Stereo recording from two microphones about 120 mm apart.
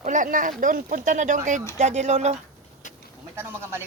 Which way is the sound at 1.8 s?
70° right (ahead or behind).